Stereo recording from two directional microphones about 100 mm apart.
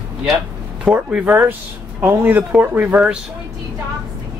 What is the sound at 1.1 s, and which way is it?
Speech, 20° right (ahead or behind).